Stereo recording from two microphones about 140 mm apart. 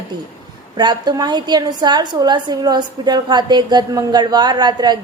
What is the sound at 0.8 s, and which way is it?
A woman's voice, 30° right (ahead or behind).